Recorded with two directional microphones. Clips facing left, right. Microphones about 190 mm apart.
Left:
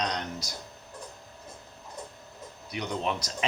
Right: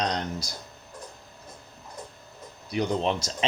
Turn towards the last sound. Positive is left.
turn(degrees=-30)  # may be behind; listen again after turning